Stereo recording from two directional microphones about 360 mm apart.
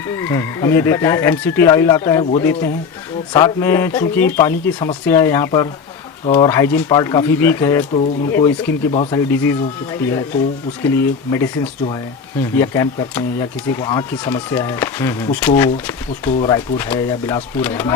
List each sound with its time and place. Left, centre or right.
0.2 s speech: centre